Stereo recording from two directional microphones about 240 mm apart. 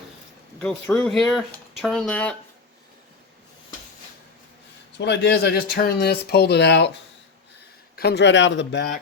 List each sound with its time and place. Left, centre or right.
0.6 s speech: centre
4.9 s speech: left
7.9 s speech: left